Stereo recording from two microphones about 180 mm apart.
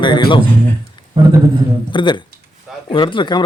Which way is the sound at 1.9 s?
25° left (ahead or behind).